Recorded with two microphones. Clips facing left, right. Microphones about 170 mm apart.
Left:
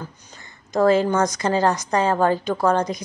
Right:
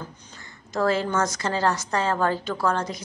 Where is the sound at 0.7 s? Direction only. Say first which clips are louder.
Left 6 dB; 15° left (ahead or behind).